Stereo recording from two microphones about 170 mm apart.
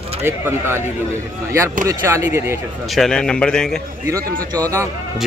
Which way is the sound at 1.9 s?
15° right (ahead or behind).